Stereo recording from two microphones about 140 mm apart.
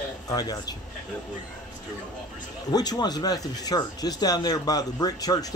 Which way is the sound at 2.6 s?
30° left (ahead or behind).